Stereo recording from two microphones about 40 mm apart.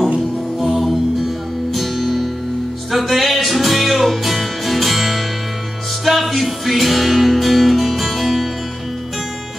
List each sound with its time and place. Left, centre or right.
0.6 s music: centre